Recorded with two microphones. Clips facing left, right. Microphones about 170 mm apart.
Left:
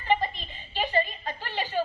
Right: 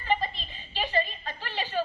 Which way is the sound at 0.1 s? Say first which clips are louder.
Left 2 dB; 15° left (ahead or behind).